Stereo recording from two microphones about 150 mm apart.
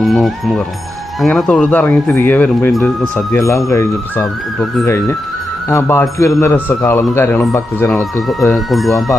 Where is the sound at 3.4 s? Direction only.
20° left (ahead or behind).